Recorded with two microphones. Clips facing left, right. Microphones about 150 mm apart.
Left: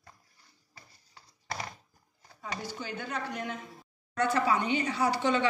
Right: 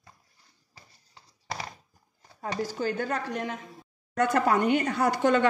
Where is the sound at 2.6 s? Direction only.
45° right (ahead or behind).